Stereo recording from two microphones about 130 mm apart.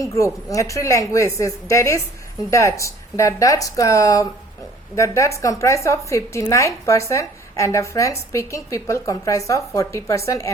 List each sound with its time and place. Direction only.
0.0 s a woman's voice: 25° left (ahead or behind)